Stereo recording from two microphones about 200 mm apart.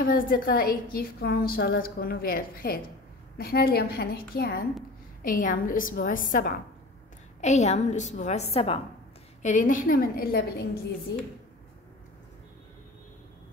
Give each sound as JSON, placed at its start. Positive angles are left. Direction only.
{"t": 0.0, "sound": "a woman's voice", "side_deg": 45}